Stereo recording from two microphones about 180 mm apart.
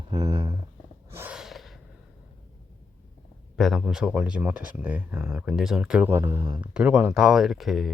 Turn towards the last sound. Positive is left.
turn(degrees=0)  # may be behind; listen again after turning